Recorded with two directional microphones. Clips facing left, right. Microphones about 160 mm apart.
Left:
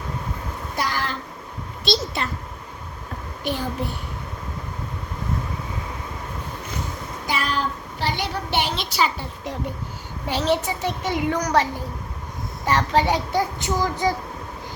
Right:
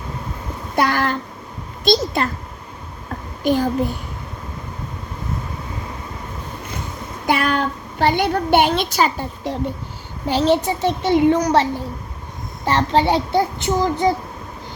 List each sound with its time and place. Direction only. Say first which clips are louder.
0.8 s a sound: right 8 dB; 55° right (ahead or behind)
1.8 s a child's voice: right 7 dB; 45° right (ahead or behind)
3.4 s a child's voice: right 9 dB; 45° right (ahead or behind)
7.3 s a woman's voice: right 6 dB; 60° right (ahead or behind); by 14.2 s 25° right (ahead or behind)